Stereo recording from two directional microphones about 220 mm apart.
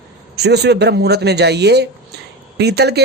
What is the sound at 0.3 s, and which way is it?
Speech, 50° right (ahead or behind).